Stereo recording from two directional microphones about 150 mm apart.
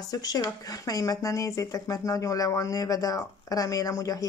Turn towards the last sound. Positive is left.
turn(degrees=20)  # may be behind; listen again after turning